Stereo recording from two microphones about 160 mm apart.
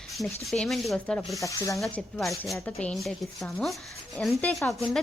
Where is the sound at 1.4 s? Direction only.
20° left (ahead or behind).